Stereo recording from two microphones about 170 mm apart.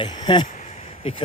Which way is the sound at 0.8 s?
35° left (ahead or behind).